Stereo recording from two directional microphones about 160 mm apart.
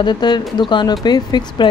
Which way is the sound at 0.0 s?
30° left (ahead or behind).